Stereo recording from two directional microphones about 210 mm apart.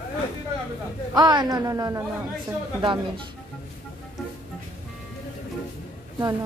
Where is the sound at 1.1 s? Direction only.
20° right (ahead or behind).